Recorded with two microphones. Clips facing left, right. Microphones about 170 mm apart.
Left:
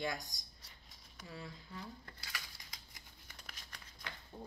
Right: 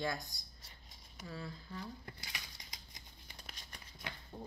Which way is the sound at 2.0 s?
20° right (ahead or behind).